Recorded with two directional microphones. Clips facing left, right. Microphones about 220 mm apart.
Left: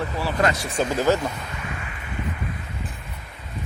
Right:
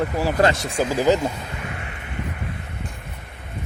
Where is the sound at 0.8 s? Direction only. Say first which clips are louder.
Right 2 dB; 10° right (ahead or behind).